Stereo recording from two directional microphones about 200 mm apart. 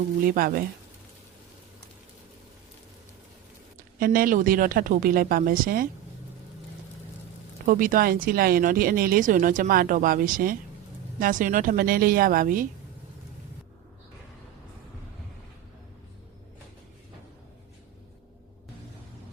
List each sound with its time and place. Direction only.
0.3 s speech: 45° right (ahead or behind)
3.8 s speech: 45° right (ahead or behind)
7.6 s speech: 45° right (ahead or behind)